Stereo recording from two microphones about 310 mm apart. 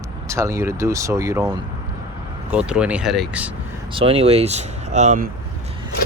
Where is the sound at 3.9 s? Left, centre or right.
Centre.